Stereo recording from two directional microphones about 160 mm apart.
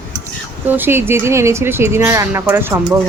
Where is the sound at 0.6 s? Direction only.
10° right (ahead or behind).